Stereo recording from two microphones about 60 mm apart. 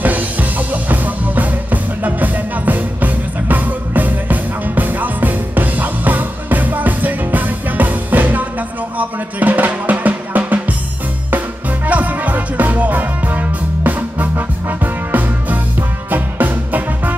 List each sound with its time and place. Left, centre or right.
0.0 s music: right
8.9 s drum: right
11.9 s music: right